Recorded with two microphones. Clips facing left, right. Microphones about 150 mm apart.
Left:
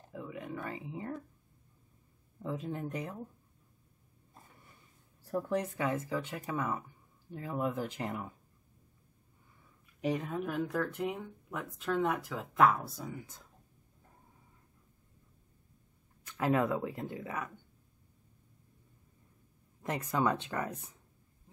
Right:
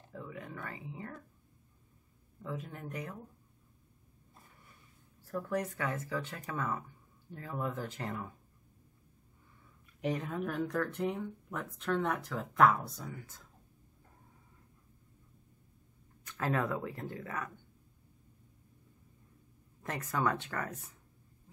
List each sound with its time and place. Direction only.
0.1 s a sound: 15° left (ahead or behind)
0.7 s speech: 20° left (ahead or behind)
2.4 s speech: 25° left (ahead or behind)
5.3 s speech: 20° left (ahead or behind)
10.0 s speech: 5° left (ahead or behind)
16.3 s speech: 15° left (ahead or behind)
19.8 s speech: 15° left (ahead or behind)